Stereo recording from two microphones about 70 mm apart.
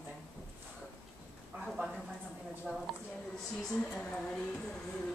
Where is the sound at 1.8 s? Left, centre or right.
Right.